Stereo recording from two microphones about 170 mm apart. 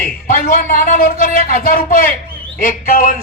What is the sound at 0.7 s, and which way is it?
A man's voice, 55° left (ahead or behind).